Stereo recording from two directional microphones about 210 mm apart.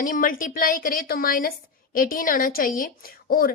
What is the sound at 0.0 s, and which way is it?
A woman's voice, 40° left (ahead or behind).